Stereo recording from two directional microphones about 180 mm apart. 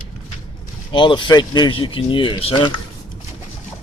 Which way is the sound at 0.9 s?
25° left (ahead or behind).